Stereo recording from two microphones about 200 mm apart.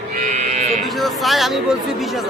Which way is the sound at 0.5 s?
35° right (ahead or behind).